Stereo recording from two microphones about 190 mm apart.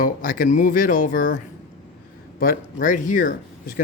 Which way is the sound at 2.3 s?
50° left (ahead or behind).